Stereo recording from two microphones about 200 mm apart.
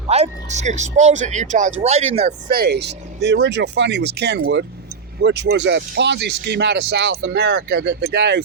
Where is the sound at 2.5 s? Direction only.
50° right (ahead or behind).